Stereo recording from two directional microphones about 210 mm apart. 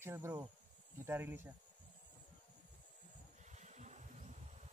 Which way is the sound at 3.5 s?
35° right (ahead or behind).